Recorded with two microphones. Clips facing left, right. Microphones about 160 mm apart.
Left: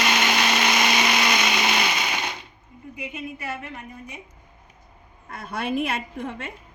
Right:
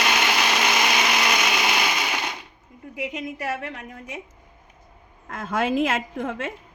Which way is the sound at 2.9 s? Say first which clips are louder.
Right 4 dB; 90° right.